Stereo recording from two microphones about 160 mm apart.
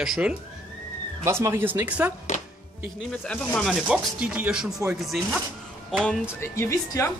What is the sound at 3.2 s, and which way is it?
Speech, 5° left (ahead or behind).